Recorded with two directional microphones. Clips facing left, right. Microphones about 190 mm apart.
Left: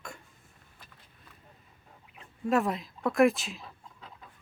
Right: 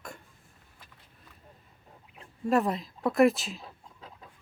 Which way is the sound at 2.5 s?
Centre (ahead or behind).